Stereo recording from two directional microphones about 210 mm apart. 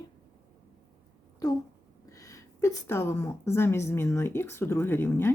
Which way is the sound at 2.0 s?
15° left (ahead or behind).